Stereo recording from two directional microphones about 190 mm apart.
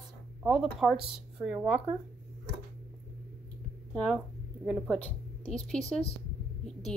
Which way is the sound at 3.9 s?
5° left (ahead or behind).